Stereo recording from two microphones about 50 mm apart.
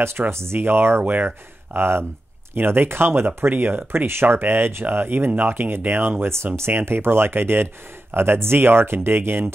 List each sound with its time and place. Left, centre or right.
0.3 s speech: right
1.0 s speech: right
1.8 s speech: right
6.3 s speech: right